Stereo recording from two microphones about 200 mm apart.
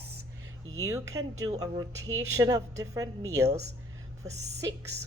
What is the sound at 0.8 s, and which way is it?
A woman's voice, 15° right (ahead or behind).